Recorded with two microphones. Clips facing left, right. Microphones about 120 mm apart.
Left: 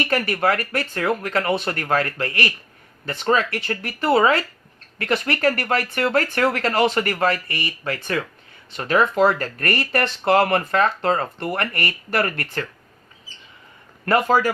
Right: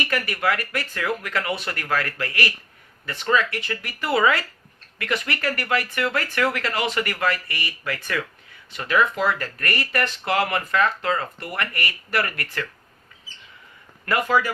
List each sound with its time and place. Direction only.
0.3 s speech: 35° left (ahead or behind)
14.0 s speech: 35° left (ahead or behind)